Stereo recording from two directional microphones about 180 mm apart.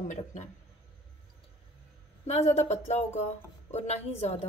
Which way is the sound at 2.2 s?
40° left (ahead or behind).